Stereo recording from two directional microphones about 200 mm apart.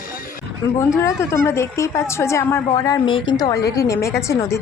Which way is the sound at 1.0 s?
15° left (ahead or behind).